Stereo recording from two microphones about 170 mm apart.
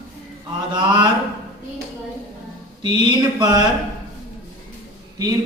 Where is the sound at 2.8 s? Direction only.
25° right (ahead or behind).